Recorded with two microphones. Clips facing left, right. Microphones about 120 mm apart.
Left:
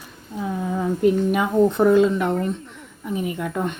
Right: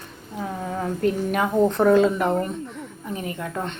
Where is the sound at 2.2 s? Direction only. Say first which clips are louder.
Even; 35° right (ahead or behind).